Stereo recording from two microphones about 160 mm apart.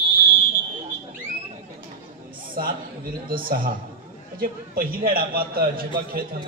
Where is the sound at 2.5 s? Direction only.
60° right (ahead or behind).